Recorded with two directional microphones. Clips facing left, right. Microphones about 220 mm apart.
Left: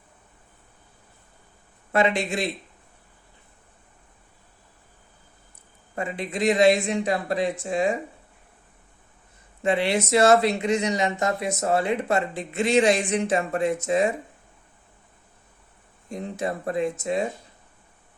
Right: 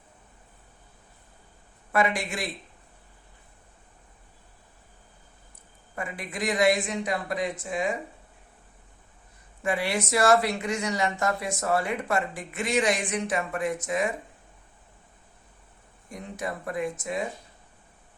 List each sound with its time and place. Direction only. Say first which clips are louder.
1.9 s speech: left 4 dB; 25° left (ahead or behind)
6.0 s speech: left 6 dB; 25° left (ahead or behind)
9.6 s speech: left 5 dB; 25° left (ahead or behind)
16.0 s speech: left 5 dB; 25° left (ahead or behind)